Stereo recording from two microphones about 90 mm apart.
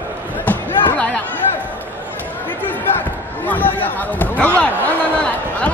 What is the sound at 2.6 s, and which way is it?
Basketball bounce, 20° left (ahead or behind).